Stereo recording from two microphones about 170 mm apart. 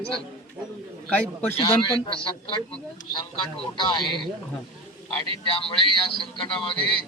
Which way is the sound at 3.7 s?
25° left (ahead or behind).